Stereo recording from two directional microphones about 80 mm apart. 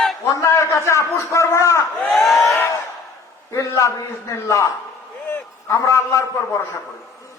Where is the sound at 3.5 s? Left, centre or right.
Left.